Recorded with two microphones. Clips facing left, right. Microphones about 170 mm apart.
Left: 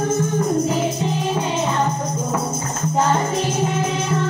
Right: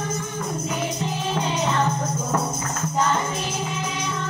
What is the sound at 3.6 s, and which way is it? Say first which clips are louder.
Music: left 7 dB; 50° left (ahead or behind).